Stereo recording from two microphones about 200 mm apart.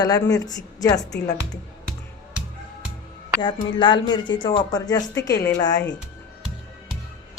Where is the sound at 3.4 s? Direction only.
25° left (ahead or behind).